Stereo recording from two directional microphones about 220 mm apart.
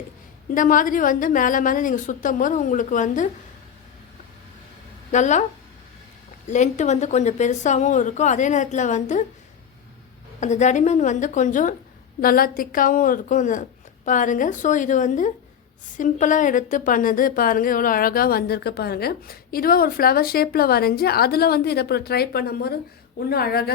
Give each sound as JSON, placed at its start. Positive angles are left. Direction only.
{"t": 0.5, "sound": "a woman's voice", "side_deg": 35}
{"t": 5.1, "sound": "a woman's voice", "side_deg": 35}
{"t": 6.5, "sound": "a woman's voice", "side_deg": 35}
{"t": 10.4, "sound": "a woman's voice", "side_deg": 30}